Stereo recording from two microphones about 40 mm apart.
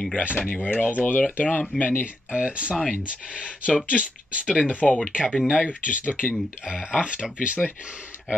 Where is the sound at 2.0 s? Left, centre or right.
Right.